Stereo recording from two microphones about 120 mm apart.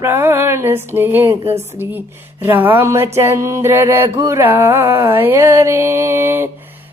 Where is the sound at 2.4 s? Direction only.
15° right (ahead or behind).